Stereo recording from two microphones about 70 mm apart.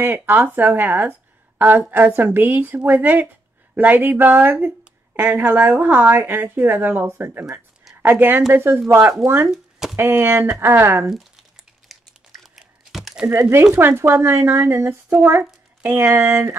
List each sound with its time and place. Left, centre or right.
0.0 s a woman's voice: right
9.5 s a sound: centre
9.9 s a woman's voice: right
11.1 s speech: centre
11.9 s a sound: centre
13.3 s a woman's voice: right